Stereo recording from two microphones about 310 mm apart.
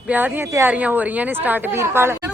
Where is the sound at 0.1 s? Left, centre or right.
Centre.